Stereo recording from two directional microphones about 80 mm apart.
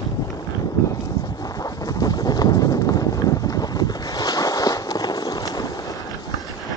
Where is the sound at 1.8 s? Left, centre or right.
Left.